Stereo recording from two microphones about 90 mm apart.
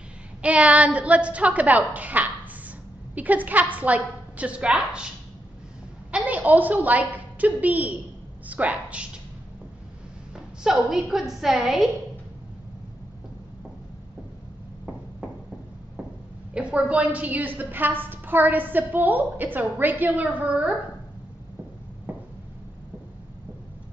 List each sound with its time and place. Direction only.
0.4 s a woman's voice: 15° right (ahead or behind)
6.1 s a woman's voice: 15° right (ahead or behind)
10.3 s a woman's voice: 5° right (ahead or behind)
16.5 s a woman's voice: 10° right (ahead or behind)